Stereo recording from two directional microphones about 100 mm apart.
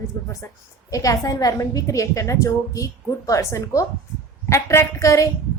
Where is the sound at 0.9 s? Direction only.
35° left (ahead or behind).